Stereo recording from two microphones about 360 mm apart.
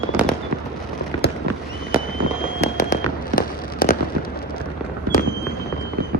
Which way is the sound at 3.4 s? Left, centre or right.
Left.